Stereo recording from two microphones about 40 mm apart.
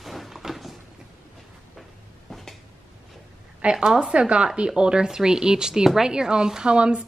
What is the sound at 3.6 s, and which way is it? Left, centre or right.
Speech, centre.